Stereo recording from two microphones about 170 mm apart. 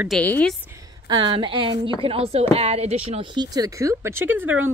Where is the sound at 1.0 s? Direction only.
30° right (ahead or behind).